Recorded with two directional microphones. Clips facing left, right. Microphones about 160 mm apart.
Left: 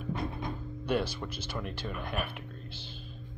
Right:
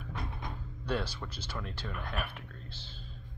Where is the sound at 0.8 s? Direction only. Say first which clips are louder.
Left 4 dB; 15° left (ahead or behind).